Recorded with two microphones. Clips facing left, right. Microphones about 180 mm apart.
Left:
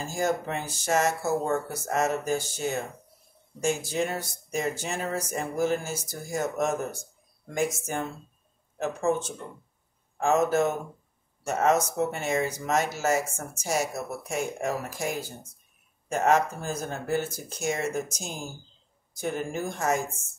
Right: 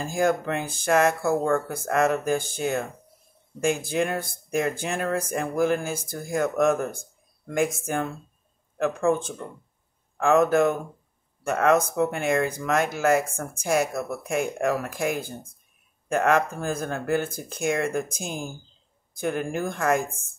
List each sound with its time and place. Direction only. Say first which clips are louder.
0.0 s speech: right 4 dB; 55° right (ahead or behind)